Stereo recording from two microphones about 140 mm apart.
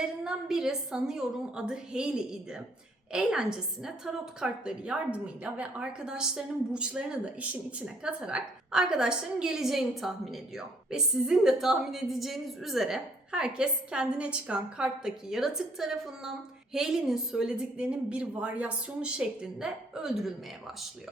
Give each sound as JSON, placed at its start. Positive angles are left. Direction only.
{"t": 0.0, "sound": "a woman's voice", "side_deg": -5}